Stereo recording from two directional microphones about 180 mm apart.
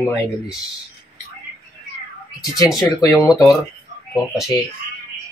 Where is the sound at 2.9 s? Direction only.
20° left (ahead or behind).